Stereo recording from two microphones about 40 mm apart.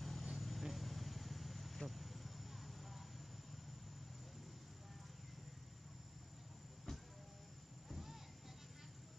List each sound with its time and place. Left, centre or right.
0.0 s vehicle: centre
6.9 s train: centre
7.9 s a sound: centre